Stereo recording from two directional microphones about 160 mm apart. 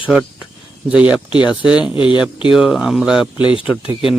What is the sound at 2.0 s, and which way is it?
Speech, 30° left (ahead or behind).